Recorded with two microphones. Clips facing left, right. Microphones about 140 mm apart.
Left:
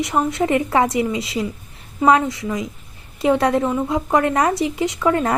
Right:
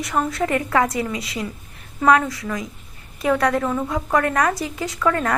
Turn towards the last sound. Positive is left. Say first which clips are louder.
# left 3 dB
turn(degrees=20)  # may be behind; listen again after turning